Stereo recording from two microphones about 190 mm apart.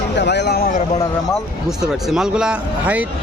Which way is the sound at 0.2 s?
65° left (ahead or behind).